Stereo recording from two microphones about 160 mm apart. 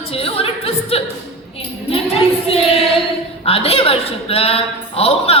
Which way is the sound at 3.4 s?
35° left (ahead or behind).